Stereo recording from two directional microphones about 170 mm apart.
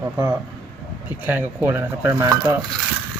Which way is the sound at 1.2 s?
10° right (ahead or behind).